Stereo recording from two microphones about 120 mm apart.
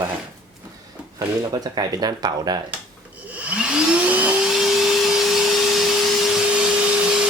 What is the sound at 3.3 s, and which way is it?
Vacuum cleaner, 10° right (ahead or behind).